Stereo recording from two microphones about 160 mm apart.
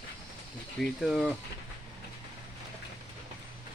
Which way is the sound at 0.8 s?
Centre (ahead or behind).